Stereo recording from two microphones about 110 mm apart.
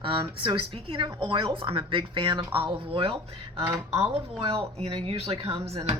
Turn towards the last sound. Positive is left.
turn(degrees=-60)  # may be behind; listen again after turning